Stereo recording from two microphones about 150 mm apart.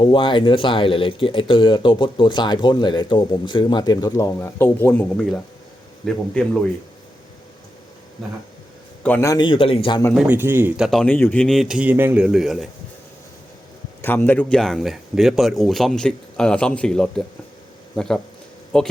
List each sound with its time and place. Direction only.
0.0 s speech: 35° left (ahead or behind); by 6.6 s 5° left (ahead or behind)
9.0 s a man's voice: 10° left (ahead or behind)
9.3 s speech: 30° left (ahead or behind)
10.2 s a man's voice: 15° right (ahead or behind)
10.8 s speech: centre (ahead or behind)
11.0 s speech: 10° left (ahead or behind)
14.0 s speech: 15° left (ahead or behind)